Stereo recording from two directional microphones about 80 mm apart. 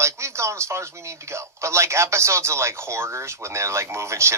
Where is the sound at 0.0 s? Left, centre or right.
Right.